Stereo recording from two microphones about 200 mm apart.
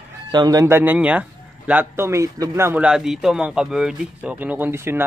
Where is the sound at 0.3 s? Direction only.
20° right (ahead or behind).